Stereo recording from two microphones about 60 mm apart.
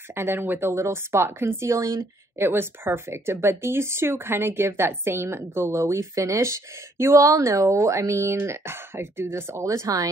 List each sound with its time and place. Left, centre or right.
0.1 s speech: right
2.3 s speech: right
7.2 s speech: right